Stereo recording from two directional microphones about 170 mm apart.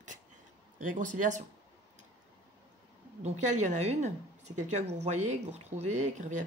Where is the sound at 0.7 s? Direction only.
50° right (ahead or behind).